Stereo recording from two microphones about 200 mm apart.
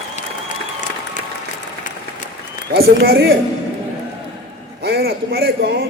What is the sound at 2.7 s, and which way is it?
Speech, 50° right (ahead or behind).